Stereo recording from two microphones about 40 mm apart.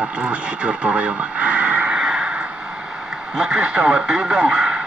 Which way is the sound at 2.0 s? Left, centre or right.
Right.